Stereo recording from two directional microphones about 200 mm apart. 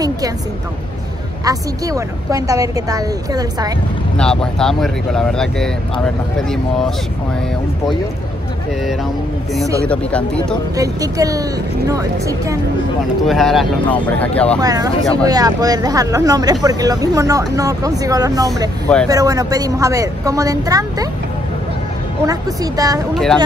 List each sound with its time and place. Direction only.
1.4 s speech: 15° right (ahead or behind)
4.2 s speech: 5° left (ahead or behind)
9.8 s speech: 5° left (ahead or behind)
10.8 s speech: 15° right (ahead or behind)
13.3 s speech: centre (ahead or behind)
14.6 s speech: 20° right (ahead or behind)
22.2 s speech: 15° right (ahead or behind)